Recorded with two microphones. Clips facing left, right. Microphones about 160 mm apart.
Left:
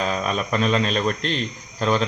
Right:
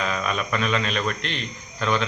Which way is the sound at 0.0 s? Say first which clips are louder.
Left 2 dB; 35° left (ahead or behind).